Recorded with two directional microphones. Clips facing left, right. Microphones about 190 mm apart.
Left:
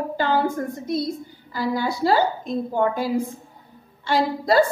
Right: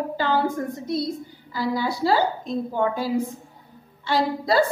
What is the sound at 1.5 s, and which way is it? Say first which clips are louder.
Speech: left 1 dB; 50° left (ahead or behind).